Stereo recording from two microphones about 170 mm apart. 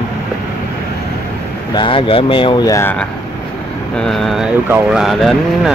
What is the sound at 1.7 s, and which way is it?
Speech, 30° left (ahead or behind).